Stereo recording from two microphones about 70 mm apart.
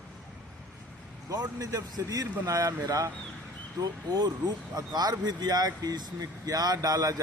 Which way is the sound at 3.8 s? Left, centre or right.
Right.